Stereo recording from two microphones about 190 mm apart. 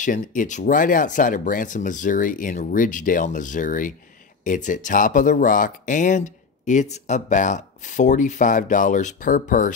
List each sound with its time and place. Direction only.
0.0 s speech: 45° left (ahead or behind)